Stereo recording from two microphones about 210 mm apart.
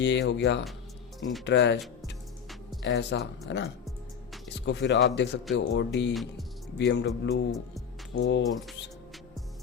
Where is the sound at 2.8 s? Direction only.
55° left (ahead or behind).